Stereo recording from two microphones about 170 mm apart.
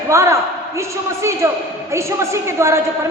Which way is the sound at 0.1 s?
15° right (ahead or behind).